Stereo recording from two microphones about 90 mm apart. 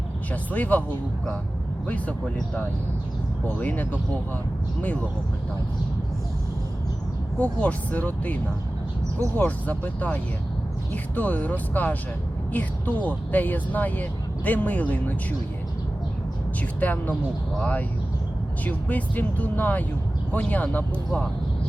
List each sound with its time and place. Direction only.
0.5 s speech: 20° left (ahead or behind)
1.9 s speech: 15° left (ahead or behind)
7.3 s speech: 15° left (ahead or behind)
16.8 s speech: 20° left (ahead or behind)